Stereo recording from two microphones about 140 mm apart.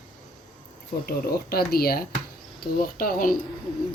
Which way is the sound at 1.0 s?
90° left.